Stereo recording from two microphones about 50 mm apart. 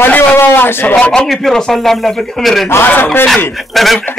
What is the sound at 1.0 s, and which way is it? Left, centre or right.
Speech, centre.